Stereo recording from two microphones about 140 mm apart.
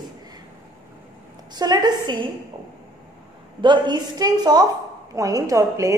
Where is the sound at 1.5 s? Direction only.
30° right (ahead or behind).